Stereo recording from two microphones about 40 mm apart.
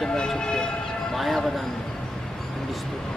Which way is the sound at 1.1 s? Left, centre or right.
Centre.